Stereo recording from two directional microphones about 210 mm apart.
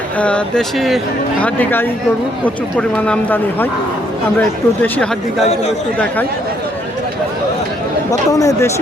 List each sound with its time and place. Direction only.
0.2 s speech: 5° left (ahead or behind)
8.1 s speech: 15° left (ahead or behind)